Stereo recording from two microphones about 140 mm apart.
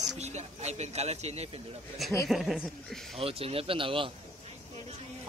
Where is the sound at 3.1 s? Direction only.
45° right (ahead or behind).